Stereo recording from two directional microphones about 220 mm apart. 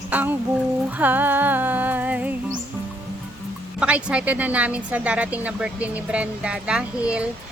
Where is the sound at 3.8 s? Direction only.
5° right (ahead or behind).